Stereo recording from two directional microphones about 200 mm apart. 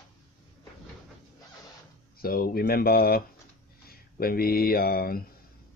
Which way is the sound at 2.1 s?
50° left (ahead or behind).